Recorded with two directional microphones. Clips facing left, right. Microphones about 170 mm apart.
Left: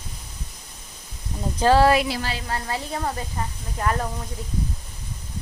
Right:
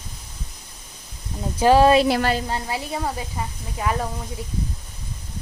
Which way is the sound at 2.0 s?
60° right (ahead or behind).